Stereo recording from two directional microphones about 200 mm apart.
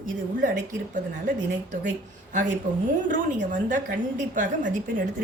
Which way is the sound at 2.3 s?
40° right (ahead or behind).